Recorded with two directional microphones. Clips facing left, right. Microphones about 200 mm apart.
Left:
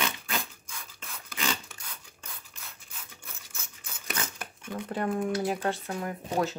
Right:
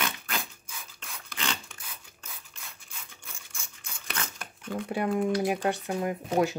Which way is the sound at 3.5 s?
5° left (ahead or behind).